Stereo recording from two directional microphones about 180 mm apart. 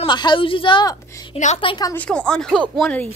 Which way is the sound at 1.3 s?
40° left (ahead or behind).